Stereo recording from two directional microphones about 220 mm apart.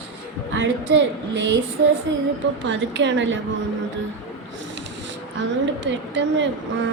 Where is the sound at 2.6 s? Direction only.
55° right (ahead or behind).